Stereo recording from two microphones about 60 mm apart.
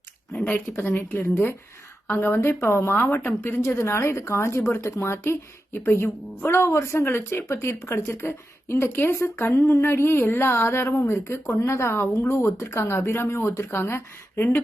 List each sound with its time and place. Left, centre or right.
0.5 s a woman's voice: left
3.7 s a woman's voice: left
8.0 s a woman's voice: left